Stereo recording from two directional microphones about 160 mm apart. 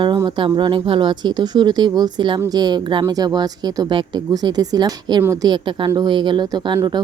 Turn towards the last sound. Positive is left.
turn(degrees=-25)  # may be behind; listen again after turning